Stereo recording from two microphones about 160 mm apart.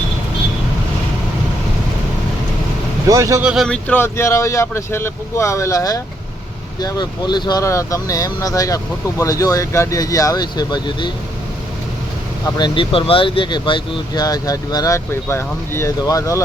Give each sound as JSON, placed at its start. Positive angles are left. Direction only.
{"t": 3.1, "sound": "speech", "side_deg": -20}
{"t": 3.4, "sound": "speech", "side_deg": 0}
{"t": 12.5, "sound": "speech", "side_deg": 30}